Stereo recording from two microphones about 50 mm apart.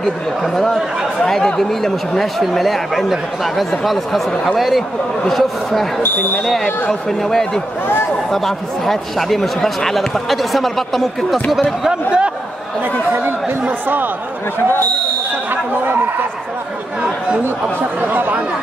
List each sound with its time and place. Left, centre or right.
0.0 s speech: centre
6.0 s speech: left
6.4 s speech: centre
11.8 s speech: centre
13.1 s chatter: right
15.5 s speech: right
18.0 s speech: right